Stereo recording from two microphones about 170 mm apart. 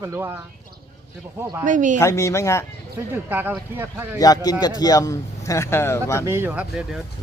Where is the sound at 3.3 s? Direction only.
10° right (ahead or behind).